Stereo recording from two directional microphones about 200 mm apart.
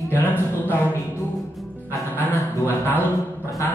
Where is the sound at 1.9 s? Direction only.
10° left (ahead or behind).